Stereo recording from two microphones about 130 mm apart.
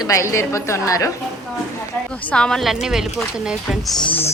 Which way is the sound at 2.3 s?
5° left (ahead or behind).